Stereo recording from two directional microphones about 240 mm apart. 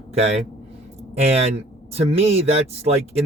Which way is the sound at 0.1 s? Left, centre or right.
Right.